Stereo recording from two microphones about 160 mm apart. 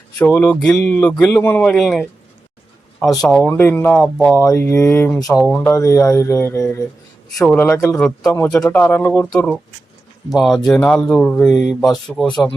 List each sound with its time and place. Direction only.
0.2 s speech: 10° left (ahead or behind)
3.2 s speech: 5° left (ahead or behind)
3.4 s speech: 15° left (ahead or behind)
4.4 s speech: 15° left (ahead or behind)
5.7 s speech: 20° left (ahead or behind)
7.9 s speech: 5° left (ahead or behind)
8.3 s speech: 15° left (ahead or behind)
10.3 s speech: centre (ahead or behind)